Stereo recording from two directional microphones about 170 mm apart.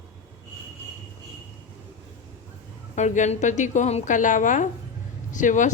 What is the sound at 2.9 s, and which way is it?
A woman's voice, 45° left (ahead or behind).